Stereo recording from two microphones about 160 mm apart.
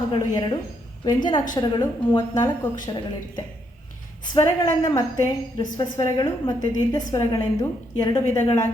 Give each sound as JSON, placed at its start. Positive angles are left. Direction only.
{"t": 0.1, "sound": "a woman's voice", "side_deg": 25}